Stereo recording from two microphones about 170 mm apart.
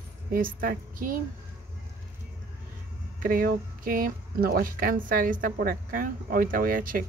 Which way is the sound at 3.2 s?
55° right (ahead or behind).